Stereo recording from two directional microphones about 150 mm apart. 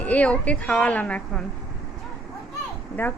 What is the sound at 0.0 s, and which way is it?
A woman's voice, 10° left (ahead or behind).